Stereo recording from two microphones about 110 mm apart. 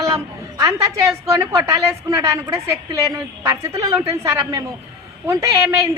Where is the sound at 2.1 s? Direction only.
25° right (ahead or behind).